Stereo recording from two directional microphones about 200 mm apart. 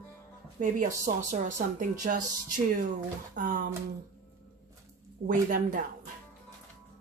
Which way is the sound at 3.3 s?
45° right (ahead or behind).